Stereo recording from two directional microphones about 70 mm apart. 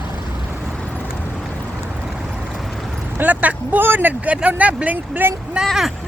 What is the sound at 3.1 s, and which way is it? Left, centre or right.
Speech, right.